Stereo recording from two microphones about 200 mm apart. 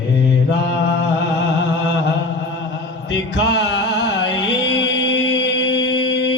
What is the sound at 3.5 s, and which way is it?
Music, 60° left (ahead or behind).